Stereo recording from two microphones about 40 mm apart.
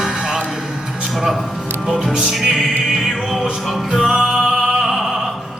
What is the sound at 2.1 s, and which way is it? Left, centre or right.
Music, centre.